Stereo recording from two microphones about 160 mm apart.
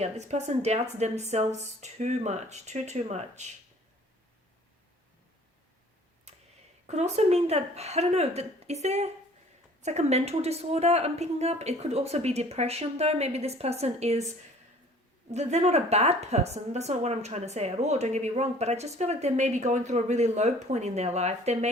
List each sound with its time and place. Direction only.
0.0 s a woman's voice: 45° right (ahead or behind)
6.8 s a woman's voice: 45° right (ahead or behind)
15.3 s a woman's voice: 45° right (ahead or behind)